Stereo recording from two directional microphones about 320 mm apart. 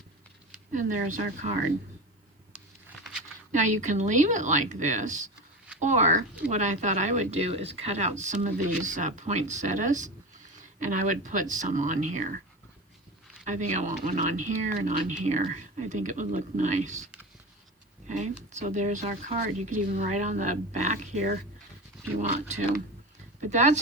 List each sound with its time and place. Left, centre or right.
0.7 s speech: right
3.5 s speech: right
13.4 s speech: right
18.1 s speech: right